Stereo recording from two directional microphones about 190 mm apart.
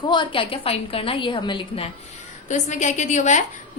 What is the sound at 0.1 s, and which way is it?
A woman's voice, 25° left (ahead or behind).